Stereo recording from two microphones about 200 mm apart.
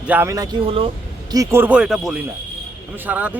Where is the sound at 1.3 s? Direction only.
10° right (ahead or behind).